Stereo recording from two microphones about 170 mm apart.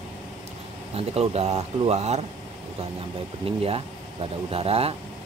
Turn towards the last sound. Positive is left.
turn(degrees=-35)  # may be behind; listen again after turning